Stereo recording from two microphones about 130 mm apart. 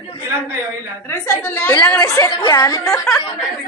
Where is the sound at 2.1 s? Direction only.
30° left (ahead or behind).